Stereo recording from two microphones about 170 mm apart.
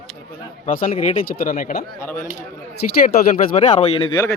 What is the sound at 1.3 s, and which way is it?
Speech, 60° left (ahead or behind).